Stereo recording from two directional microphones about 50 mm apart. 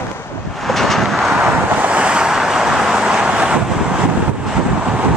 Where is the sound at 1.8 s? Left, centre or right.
Right.